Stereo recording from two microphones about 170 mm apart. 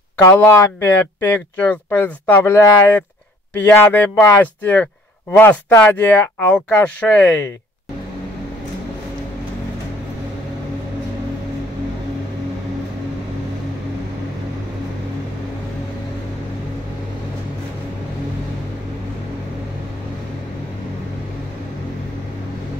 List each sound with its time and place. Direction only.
0.2 s speech: 15° left (ahead or behind)